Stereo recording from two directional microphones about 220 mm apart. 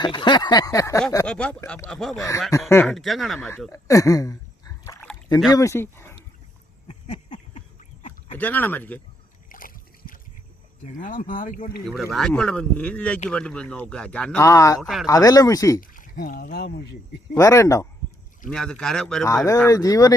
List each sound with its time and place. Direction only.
0.0 s a sound: 20° left (ahead or behind)
1.3 s speech: 5° left (ahead or behind)
3.7 s speech: 15° left (ahead or behind)
6.8 s a sound: 30° left (ahead or behind)
8.4 s speech: 10° left (ahead or behind)
9.5 s a sound: 40° left (ahead or behind)
10.9 s speech: 35° left (ahead or behind)
12.1 s speech: centre (ahead or behind)
14.8 s speech: centre (ahead or behind)
15.0 s speech: 15° left (ahead or behind)
15.8 s speech: 40° left (ahead or behind)
17.3 s speech: 15° left (ahead or behind)
18.4 s speech: centre (ahead or behind)